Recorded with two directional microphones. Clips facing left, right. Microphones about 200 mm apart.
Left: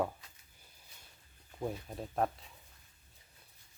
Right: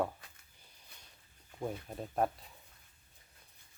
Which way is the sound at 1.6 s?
Centre (ahead or behind).